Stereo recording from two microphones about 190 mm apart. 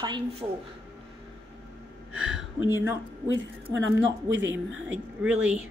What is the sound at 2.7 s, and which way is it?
Speech, 10° right (ahead or behind).